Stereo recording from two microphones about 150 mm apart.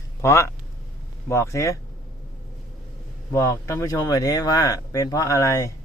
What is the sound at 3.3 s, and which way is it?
Speech, 20° left (ahead or behind).